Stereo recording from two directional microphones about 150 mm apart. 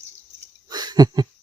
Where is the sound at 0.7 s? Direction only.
25° right (ahead or behind).